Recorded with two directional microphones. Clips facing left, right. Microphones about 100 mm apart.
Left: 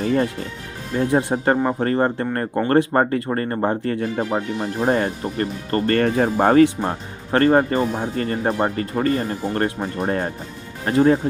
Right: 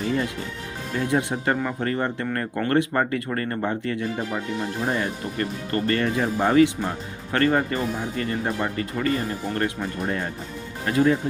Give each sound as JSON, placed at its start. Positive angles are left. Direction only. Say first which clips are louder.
{"t": 0.0, "sound": "music", "louder": "left 5 dB", "side_deg": 45}
{"t": 0.9, "sound": "speech", "louder": "left 5 dB", "side_deg": 35}